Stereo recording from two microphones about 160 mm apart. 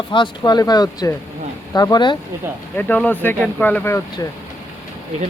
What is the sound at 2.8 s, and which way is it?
Speech, 10° left (ahead or behind).